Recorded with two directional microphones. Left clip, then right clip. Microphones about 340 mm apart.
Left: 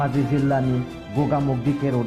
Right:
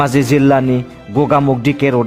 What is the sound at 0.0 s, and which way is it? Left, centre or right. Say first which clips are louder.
Speech: right 11 dB; right.